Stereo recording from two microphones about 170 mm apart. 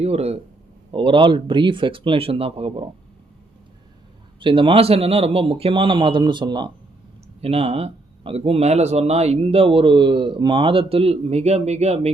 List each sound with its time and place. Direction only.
0.0 s speech: 40° right (ahead or behind)
4.4 s speech: 30° right (ahead or behind)